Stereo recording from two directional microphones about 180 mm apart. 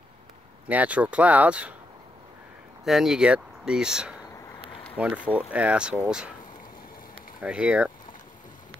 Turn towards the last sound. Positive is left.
turn(degrees=-5)  # may be behind; listen again after turning